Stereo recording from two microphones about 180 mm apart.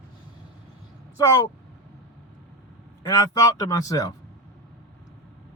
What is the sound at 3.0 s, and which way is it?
A man's voice, 20° left (ahead or behind).